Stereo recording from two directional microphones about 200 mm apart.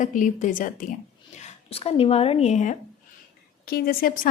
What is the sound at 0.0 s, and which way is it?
Speech, 40° left (ahead or behind).